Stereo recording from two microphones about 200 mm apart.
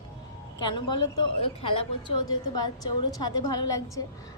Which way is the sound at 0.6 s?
20° left (ahead or behind).